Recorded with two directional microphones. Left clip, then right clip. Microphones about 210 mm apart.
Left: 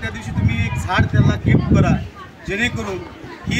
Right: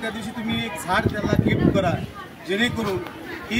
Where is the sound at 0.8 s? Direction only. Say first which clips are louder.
Left 3 dB; 5° right (ahead or behind).